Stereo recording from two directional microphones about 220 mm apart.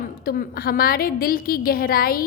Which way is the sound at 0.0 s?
40° left (ahead or behind).